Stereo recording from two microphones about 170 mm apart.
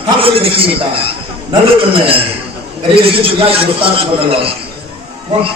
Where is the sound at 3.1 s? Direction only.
35° right (ahead or behind).